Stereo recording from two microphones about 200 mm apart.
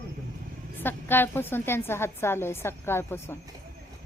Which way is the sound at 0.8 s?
10° left (ahead or behind).